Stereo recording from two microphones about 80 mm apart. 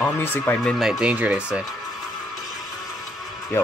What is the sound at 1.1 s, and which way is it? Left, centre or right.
Speech, centre.